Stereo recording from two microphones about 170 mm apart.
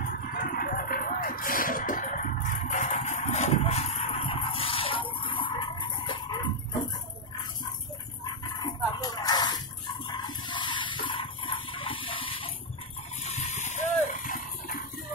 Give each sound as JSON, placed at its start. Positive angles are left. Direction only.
{"t": 0.0, "sound": "music", "side_deg": 55}
{"t": 8.5, "sound": "dog", "side_deg": 25}
{"t": 10.2, "sound": "a sound", "side_deg": 25}